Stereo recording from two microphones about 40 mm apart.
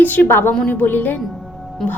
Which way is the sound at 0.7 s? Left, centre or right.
Left.